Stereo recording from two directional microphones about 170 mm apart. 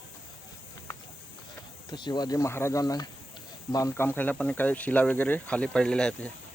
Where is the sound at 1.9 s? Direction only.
25° left (ahead or behind); by 6.3 s 5° left (ahead or behind).